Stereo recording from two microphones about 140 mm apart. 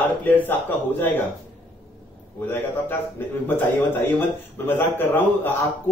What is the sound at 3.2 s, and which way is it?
A man's voice, 15° left (ahead or behind).